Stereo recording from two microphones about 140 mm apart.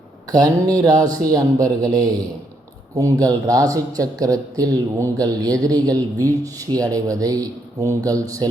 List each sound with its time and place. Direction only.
0.3 s speech: 25° right (ahead or behind)